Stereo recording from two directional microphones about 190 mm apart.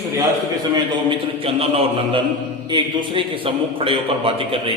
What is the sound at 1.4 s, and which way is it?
A man's voice, 30° right (ahead or behind).